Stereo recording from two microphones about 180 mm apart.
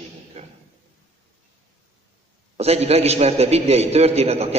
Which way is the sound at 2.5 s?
35° right (ahead or behind).